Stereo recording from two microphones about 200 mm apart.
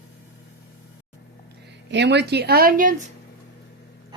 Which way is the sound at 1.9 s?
60° right (ahead or behind).